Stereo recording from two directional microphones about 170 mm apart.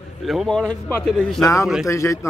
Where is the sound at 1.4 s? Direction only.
20° left (ahead or behind).